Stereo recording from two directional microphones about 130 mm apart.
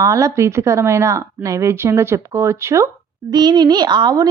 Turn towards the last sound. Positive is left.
turn(degrees=-35)  # may be behind; listen again after turning